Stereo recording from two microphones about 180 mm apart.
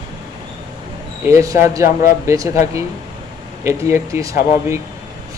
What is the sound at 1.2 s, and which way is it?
Speech, 15° right (ahead or behind).